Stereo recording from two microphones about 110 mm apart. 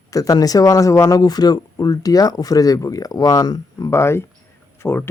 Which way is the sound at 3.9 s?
25° left (ahead or behind).